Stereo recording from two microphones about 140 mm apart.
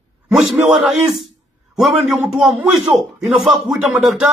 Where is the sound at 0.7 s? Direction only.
Centre (ahead or behind).